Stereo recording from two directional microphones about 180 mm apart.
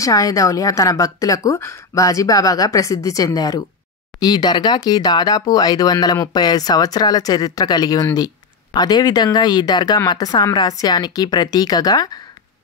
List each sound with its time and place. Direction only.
0.0 s speech: 20° left (ahead or behind)